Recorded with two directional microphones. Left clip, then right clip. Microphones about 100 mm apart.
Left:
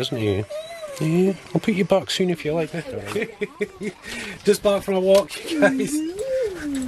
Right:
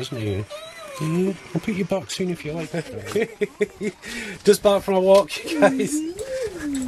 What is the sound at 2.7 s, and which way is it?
Speech, 25° right (ahead or behind).